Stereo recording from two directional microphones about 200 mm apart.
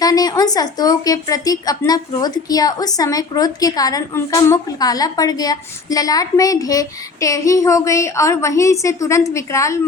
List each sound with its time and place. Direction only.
0.0 s a woman's voice: 20° left (ahead or behind)